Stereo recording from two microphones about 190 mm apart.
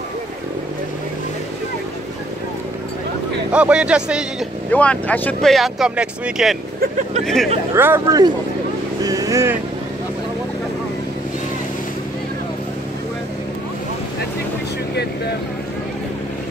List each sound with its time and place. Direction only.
3.5 s speech: 5° right (ahead or behind)
4.6 s speech: 5° left (ahead or behind)
7.7 s speech: 10° right (ahead or behind)